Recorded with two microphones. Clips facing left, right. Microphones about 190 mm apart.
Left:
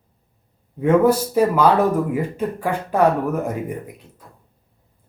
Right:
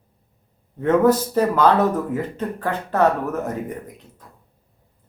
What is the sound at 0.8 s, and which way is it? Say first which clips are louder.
Speech: left 1 dB; 10° left (ahead or behind).